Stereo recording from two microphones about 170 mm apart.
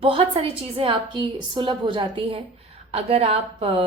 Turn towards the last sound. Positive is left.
turn(degrees=-35)  # may be behind; listen again after turning